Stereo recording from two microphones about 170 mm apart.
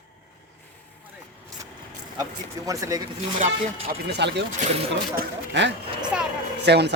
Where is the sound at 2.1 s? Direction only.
20° right (ahead or behind).